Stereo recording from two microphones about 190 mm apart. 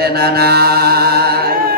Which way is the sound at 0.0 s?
55° right (ahead or behind).